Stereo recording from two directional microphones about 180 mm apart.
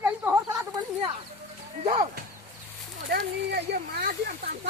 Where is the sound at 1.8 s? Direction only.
35° right (ahead or behind).